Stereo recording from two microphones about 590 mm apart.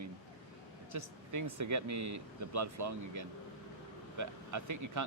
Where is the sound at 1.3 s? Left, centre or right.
Right.